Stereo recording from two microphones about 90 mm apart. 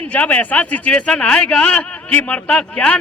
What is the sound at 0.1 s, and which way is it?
A man's voice, 15° left (ahead or behind).